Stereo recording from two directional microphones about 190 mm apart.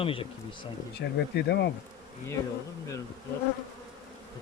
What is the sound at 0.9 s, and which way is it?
Bee, 60° left (ahead or behind).